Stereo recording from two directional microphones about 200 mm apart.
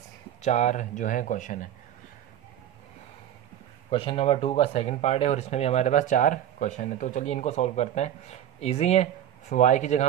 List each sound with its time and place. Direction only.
0.4 s speech: 35° left (ahead or behind)
3.9 s speech: 25° left (ahead or behind)